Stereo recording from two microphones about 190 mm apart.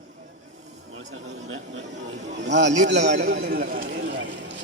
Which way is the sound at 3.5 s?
50° right (ahead or behind).